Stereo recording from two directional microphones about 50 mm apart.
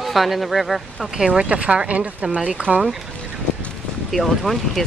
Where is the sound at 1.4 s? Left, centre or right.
Right.